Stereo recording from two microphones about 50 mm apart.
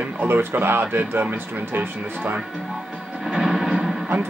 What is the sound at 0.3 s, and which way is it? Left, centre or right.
Speech, right.